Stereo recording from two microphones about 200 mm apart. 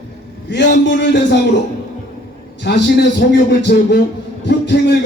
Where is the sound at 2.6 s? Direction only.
60° left (ahead or behind).